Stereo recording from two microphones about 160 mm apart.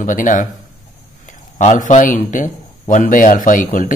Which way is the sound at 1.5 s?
50° left (ahead or behind).